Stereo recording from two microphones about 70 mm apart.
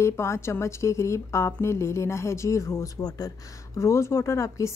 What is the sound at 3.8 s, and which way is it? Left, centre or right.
Speech, left.